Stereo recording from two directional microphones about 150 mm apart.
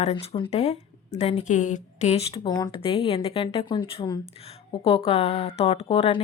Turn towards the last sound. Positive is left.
turn(degrees=40)  # may be behind; listen again after turning